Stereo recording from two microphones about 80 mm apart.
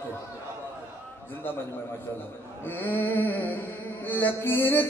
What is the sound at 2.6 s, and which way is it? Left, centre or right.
Mantra, left.